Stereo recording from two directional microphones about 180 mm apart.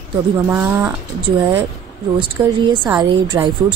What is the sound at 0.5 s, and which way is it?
Speech, 15° right (ahead or behind).